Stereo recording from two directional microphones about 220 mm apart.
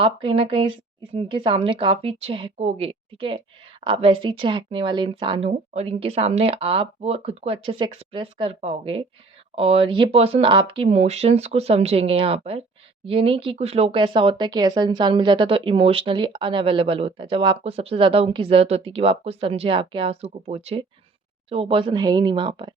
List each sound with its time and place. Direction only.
0.0 s a woman's voice: 25° right (ahead or behind)